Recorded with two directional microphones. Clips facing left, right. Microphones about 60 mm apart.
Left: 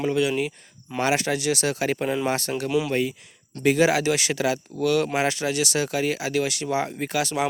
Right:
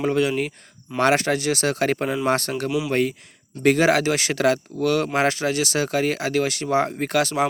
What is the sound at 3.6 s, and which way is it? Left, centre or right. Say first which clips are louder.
Speech: right 2 dB; right.